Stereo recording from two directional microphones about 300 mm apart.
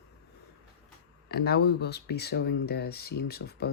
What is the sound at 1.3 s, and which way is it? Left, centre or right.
Speech, left.